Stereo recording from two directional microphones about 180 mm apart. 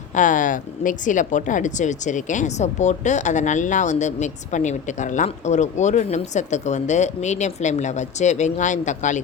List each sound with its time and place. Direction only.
0.1 s speech: 45° left (ahead or behind)